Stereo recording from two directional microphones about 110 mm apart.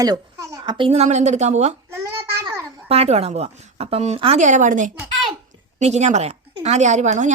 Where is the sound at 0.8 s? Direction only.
85° right.